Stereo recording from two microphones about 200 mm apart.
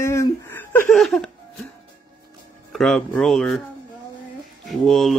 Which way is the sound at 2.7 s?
Centre (ahead or behind).